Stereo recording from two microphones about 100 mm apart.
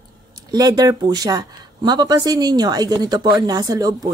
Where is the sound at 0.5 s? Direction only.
40° right (ahead or behind).